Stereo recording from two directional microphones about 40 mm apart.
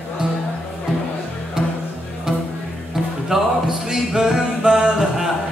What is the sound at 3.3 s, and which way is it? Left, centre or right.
Music, centre.